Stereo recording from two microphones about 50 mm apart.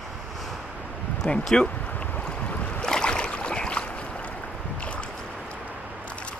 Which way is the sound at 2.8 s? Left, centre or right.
Centre.